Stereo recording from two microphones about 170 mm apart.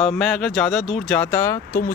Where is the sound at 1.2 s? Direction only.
15° left (ahead or behind).